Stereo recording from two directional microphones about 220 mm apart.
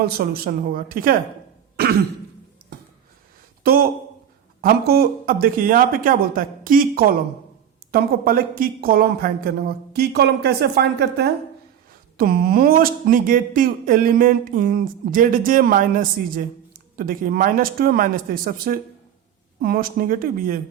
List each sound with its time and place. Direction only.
0.0 s a woman's voice: 45° right (ahead or behind)
1.7 s throat clearing: 45° right (ahead or behind)
3.6 s a woman's voice: 40° right (ahead or behind)